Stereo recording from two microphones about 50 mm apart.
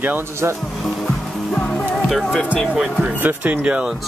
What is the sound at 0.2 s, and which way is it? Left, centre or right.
Speech, right.